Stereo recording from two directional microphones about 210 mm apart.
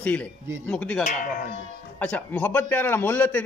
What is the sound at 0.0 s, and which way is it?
Speech, 5° left (ahead or behind).